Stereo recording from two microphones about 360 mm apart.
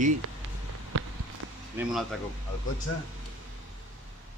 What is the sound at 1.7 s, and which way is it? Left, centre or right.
Speech, centre.